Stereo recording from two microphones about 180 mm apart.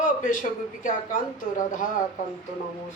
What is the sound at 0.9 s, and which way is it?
Speech, 45° left (ahead or behind).